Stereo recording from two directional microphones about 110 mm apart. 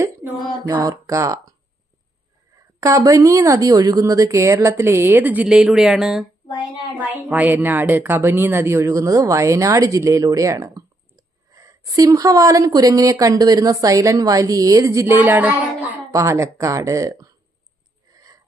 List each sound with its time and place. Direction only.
0.7 s a woman's voice: 30° right (ahead or behind)
2.8 s a woman's voice: 30° right (ahead or behind); by 6.2 s 5° right (ahead or behind)
7.0 s a woman's voice: 15° right (ahead or behind)
16.1 s a woman's voice: 25° right (ahead or behind)
18.1 s a sound: 30° right (ahead or behind)